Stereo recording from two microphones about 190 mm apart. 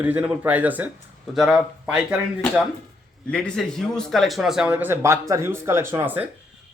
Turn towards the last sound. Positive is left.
turn(degrees=-10)  # may be behind; listen again after turning